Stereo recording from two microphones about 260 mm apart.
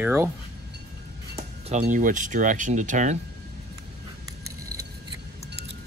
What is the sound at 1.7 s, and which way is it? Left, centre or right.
Speech, right.